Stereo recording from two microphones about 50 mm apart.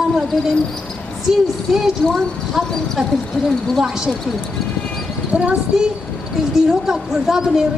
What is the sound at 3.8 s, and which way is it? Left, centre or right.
Speech, centre.